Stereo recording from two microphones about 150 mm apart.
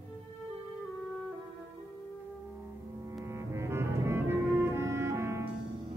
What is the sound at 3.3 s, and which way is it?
Music, 20° right (ahead or behind).